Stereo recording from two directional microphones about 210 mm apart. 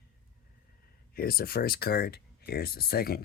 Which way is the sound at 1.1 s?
45° left (ahead or behind).